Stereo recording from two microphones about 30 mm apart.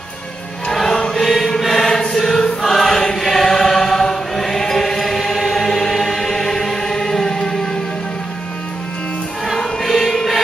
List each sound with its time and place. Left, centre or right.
0.8 s choir: left
1.2 s choir: centre
9.6 s choir: centre